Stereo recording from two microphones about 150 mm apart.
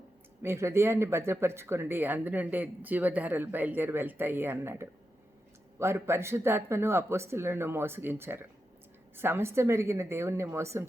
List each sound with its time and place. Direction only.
0.4 s speech: 15° right (ahead or behind)